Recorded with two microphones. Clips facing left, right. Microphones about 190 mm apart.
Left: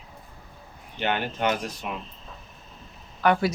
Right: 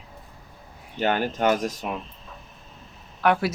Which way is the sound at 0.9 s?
40° right (ahead or behind).